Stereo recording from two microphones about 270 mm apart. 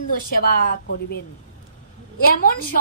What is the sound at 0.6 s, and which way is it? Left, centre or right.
A woman's voice, left.